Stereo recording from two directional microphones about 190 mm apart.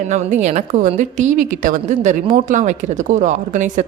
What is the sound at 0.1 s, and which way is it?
A woman's voice, 40° right (ahead or behind).